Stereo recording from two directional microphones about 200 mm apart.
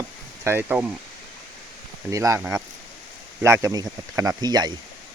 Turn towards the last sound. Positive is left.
turn(degrees=-20)  # may be behind; listen again after turning